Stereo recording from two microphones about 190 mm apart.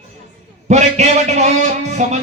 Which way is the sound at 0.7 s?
35° right (ahead or behind).